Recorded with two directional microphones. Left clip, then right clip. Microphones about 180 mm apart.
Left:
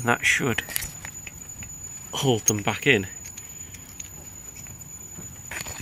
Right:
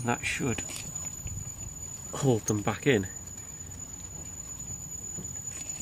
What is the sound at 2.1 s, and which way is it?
Speech, 10° left (ahead or behind).